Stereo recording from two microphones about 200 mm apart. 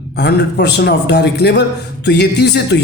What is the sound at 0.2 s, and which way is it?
A man's voice, 60° left (ahead or behind).